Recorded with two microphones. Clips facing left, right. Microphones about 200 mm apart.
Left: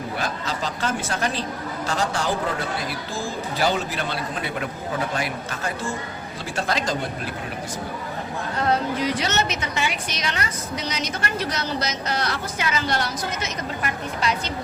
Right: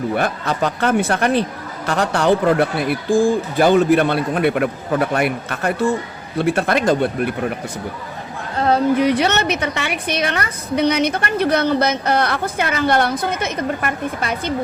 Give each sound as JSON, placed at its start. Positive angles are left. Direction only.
{"t": 0.2, "sound": "a woman's voice", "side_deg": -60}
{"t": 9.0, "sound": "a woman's voice", "side_deg": -60}